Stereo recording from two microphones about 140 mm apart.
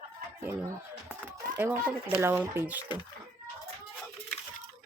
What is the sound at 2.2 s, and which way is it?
Speech, 15° right (ahead or behind).